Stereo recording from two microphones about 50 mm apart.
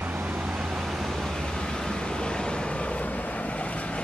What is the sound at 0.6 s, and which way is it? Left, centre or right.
Vehicle, centre.